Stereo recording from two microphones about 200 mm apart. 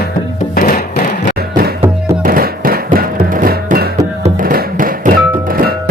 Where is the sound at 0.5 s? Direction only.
40° left (ahead or behind).